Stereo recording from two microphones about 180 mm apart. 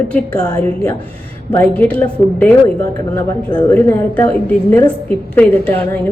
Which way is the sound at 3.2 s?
20° left (ahead or behind).